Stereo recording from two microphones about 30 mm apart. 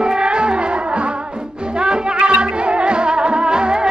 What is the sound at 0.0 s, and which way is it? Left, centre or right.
Music, right.